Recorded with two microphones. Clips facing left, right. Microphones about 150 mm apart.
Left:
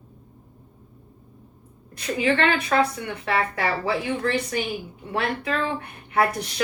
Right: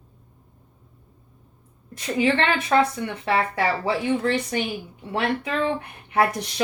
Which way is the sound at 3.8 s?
25° right (ahead or behind).